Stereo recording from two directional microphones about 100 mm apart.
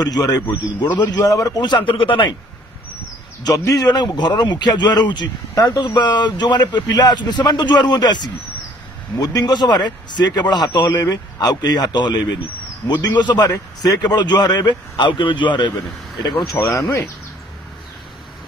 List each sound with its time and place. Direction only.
0.0 s a man's voice: 40° left (ahead or behind); by 2.2 s 60° left (ahead or behind)
3.4 s a man's voice: 35° left (ahead or behind); by 15.4 s 55° left (ahead or behind)
16.2 s speech: 45° left (ahead or behind)